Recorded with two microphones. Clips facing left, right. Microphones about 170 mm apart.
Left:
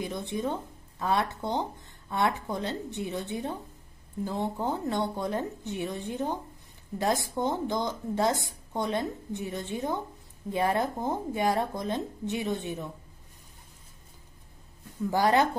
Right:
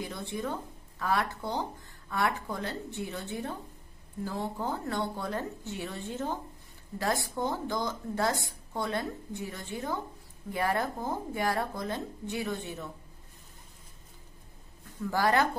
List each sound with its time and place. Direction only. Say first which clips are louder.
0.0 s speech: left 4 dB; 20° left (ahead or behind)
15.0 s speech: left 3 dB; 20° left (ahead or behind)